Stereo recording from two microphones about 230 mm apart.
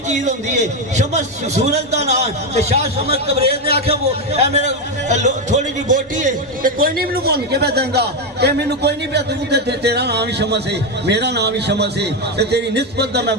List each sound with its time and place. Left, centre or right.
0.1 s a man's voice: right